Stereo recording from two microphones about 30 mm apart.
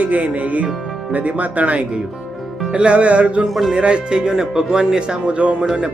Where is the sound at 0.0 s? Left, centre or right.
Right.